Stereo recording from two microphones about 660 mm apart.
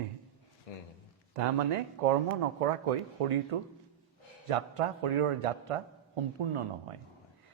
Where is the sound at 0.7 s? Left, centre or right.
Left.